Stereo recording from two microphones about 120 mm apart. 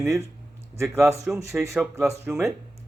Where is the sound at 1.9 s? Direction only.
20° right (ahead or behind).